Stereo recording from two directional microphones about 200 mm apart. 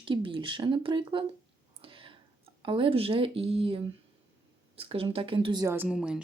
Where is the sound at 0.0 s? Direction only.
25° right (ahead or behind).